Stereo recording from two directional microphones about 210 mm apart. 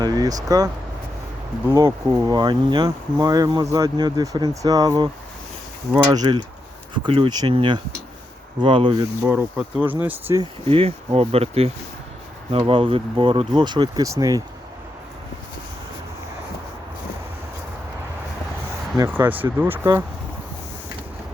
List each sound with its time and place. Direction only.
0.0 s speech: 20° right (ahead or behind)
9.2 s speech: 5° right (ahead or behind)
10.7 s speech: 25° right (ahead or behind)
18.9 s speech: 10° right (ahead or behind)